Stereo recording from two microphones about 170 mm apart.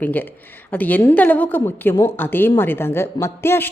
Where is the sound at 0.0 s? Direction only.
10° left (ahead or behind).